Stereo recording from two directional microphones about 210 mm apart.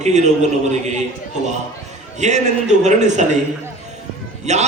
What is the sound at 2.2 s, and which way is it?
A man's voice, 35° right (ahead or behind).